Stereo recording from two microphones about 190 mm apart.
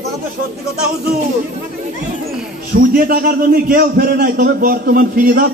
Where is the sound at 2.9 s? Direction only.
50° right (ahead or behind).